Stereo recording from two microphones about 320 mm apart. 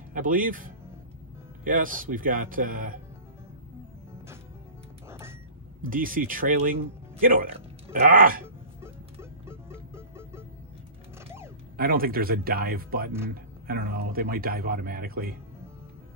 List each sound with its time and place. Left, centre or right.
0.1 s a man's voice: right
5.8 s a man's voice: right
8.8 s music: centre
11.7 s a man's voice: right